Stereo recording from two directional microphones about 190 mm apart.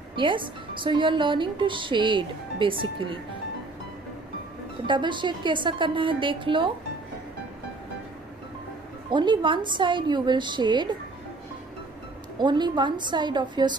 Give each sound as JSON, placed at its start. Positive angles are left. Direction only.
{"t": 0.1, "sound": "a woman's voice", "side_deg": -25}
{"t": 4.8, "sound": "a woman's voice", "side_deg": -25}
{"t": 9.1, "sound": "a woman's voice", "side_deg": -25}
{"t": 12.4, "sound": "a woman's voice", "side_deg": -25}